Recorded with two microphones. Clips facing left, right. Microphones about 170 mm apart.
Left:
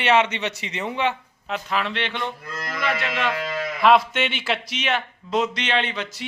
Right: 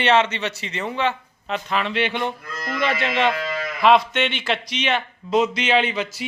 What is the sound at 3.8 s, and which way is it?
A man's voice, centre (ahead or behind).